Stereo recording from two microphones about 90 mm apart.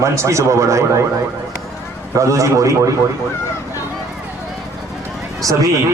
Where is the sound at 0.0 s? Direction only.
35° right (ahead or behind).